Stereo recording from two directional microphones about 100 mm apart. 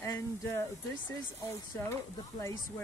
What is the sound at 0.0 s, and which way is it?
Speech, 35° left (ahead or behind).